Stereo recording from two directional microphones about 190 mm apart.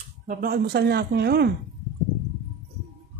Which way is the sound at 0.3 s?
50° right (ahead or behind).